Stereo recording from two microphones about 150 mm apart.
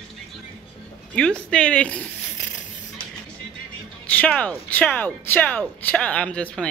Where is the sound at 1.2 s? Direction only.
5° left (ahead or behind).